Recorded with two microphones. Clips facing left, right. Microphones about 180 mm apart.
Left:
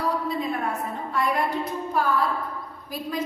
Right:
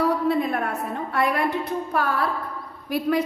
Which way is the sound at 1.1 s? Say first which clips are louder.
Right 2 dB; 60° right (ahead or behind).